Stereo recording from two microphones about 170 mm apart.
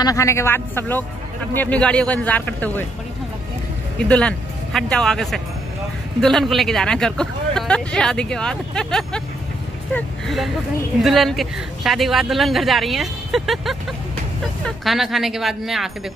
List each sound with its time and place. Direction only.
0.0 s a man's voice: 20° left (ahead or behind)
4.0 s speech: 5° left (ahead or behind)